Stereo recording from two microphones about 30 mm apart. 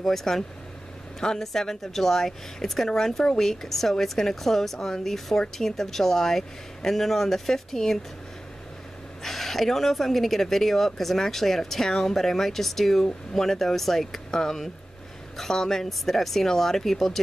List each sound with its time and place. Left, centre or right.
0.0 s speech: centre
9.2 s speech: centre